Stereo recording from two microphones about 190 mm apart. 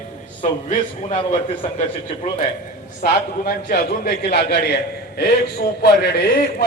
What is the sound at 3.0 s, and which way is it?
A man's voice, 55° left (ahead or behind).